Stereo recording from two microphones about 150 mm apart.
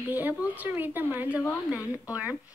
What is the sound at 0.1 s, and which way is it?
A woman's voice, 10° right (ahead or behind).